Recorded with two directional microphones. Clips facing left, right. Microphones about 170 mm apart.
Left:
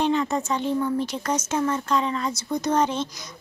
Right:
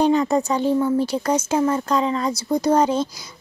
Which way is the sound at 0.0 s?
35° right (ahead or behind).